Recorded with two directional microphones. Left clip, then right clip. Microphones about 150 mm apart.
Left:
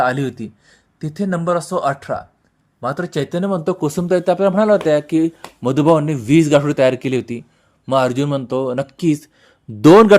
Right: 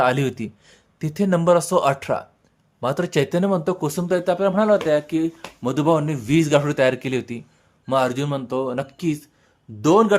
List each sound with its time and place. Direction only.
0.0 s speech: 5° right (ahead or behind)
3.6 s speech: 25° left (ahead or behind); by 10.2 s 55° left (ahead or behind)